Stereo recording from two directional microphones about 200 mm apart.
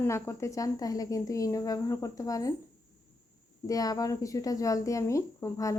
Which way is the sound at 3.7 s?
20° left (ahead or behind).